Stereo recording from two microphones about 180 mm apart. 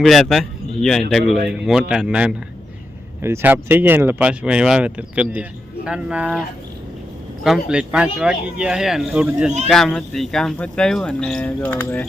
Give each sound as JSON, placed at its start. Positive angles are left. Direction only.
{"t": 0.0, "sound": "speech", "side_deg": 0}
{"t": 7.4, "sound": "speech", "side_deg": -5}